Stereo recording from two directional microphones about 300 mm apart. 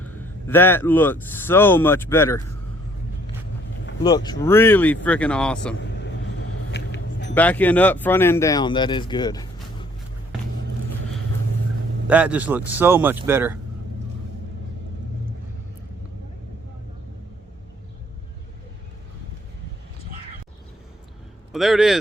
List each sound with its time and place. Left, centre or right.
0.0 s speech: centre
4.0 s speech: centre
5.7 s vehicle: left
7.3 s speech: centre
12.0 s speech: centre
21.5 s speech: centre